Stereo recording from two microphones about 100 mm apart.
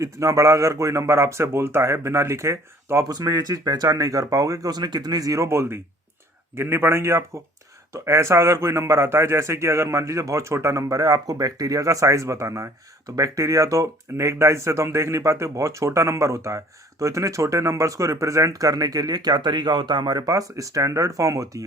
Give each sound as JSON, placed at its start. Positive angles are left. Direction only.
{"t": 0.0, "sound": "a man's voice", "side_deg": -30}